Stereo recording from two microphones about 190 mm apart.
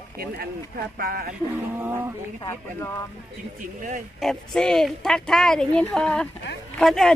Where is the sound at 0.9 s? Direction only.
50° right (ahead or behind).